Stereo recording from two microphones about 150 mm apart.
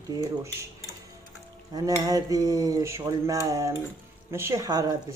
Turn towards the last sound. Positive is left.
turn(degrees=-25)  # may be behind; listen again after turning